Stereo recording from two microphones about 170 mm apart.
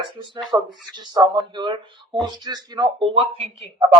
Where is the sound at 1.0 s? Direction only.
25° right (ahead or behind).